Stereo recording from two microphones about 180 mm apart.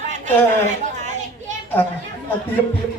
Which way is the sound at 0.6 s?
40° right (ahead or behind).